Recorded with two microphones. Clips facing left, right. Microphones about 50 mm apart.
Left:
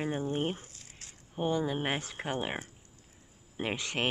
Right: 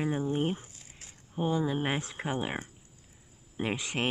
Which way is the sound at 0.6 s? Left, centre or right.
Centre.